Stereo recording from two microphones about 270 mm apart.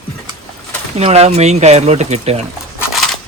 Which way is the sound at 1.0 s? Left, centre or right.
Right.